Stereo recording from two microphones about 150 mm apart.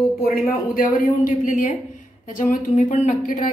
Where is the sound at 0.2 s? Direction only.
75° left (ahead or behind).